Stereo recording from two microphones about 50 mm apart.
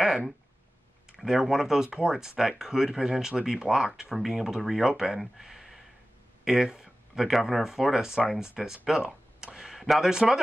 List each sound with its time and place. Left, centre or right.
1.1 s speech: centre